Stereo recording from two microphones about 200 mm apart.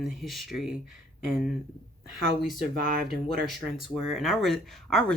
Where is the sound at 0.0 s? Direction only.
Centre (ahead or behind).